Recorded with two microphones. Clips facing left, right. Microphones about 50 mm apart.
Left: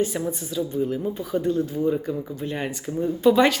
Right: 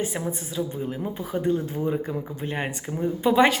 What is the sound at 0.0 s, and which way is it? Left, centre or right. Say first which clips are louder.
A woman's voice: left 3 dB; right.